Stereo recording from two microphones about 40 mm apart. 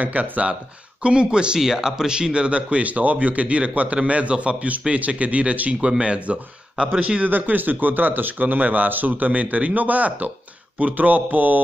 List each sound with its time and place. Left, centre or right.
0.0 s speech: right
1.0 s speech: right
1.6 s speech: centre; by 6.9 s right
7.2 s speech: right